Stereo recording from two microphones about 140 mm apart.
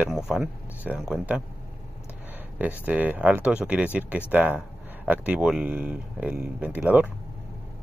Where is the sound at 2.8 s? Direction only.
10° right (ahead or behind).